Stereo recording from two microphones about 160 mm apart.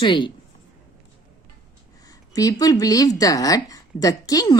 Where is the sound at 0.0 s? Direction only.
30° left (ahead or behind).